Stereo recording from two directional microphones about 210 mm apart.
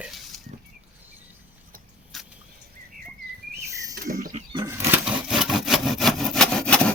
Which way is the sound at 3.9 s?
40° right (ahead or behind).